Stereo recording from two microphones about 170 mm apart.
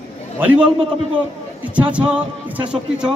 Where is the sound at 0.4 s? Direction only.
10° right (ahead or behind).